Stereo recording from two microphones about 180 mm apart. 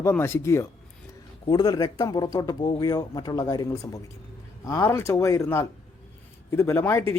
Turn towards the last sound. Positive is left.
turn(degrees=15)  # may be behind; listen again after turning